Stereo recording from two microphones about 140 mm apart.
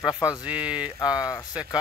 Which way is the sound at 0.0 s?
30° left (ahead or behind).